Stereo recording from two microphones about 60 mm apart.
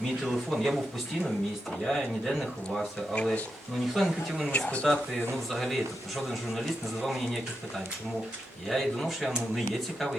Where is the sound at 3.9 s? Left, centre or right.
Centre.